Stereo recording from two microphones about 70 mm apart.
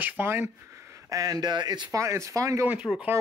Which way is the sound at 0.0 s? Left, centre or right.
Right.